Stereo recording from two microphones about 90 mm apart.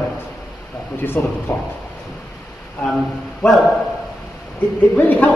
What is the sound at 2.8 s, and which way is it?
Speech, centre (ahead or behind).